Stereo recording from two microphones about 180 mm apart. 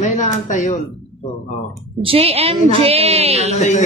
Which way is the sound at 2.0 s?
30° right (ahead or behind).